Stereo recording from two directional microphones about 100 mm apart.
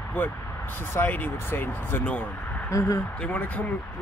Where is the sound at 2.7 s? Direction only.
35° left (ahead or behind).